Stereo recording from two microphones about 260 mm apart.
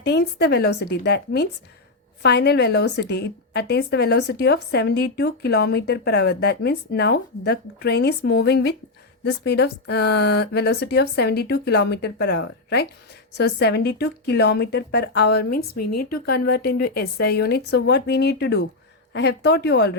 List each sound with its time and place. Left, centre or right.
0.0 s a woman's voice: left